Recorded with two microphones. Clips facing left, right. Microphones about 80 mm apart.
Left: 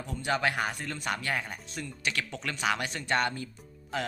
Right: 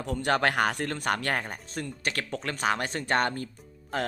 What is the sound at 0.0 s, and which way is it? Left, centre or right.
Speech, right.